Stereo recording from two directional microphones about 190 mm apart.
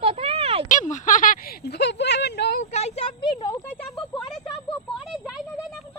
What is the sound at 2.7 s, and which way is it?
Speech, 35° left (ahead or behind).